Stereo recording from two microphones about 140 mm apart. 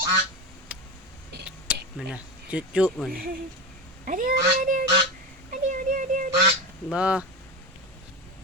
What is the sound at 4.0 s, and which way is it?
Speech, 75° right (ahead or behind).